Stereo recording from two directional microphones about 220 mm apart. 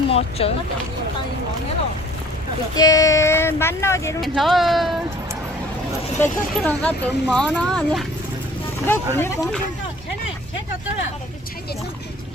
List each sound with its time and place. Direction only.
0.1 s speech: 25° left (ahead or behind)
2.7 s speech: 15° left (ahead or behind)
4.2 s speech: centre (ahead or behind)
6.1 s speech: 5° left (ahead or behind)